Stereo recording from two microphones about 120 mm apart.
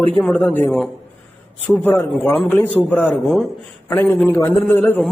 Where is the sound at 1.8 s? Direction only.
15° left (ahead or behind).